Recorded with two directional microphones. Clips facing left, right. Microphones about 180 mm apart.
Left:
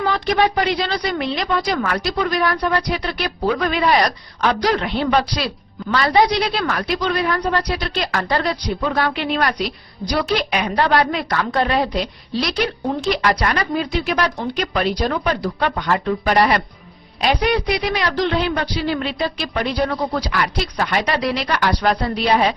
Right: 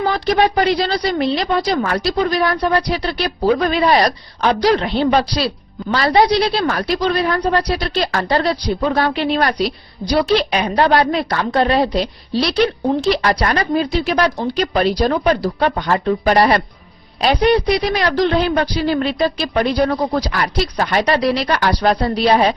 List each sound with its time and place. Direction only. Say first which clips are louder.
0.3 s a woman's voice: right 4 dB; 35° right (ahead or behind)
17.7 s a woman's voice: right 4 dB; 35° right (ahead or behind)